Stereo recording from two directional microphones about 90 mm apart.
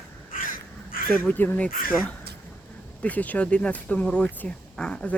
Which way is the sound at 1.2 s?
20° left (ahead or behind).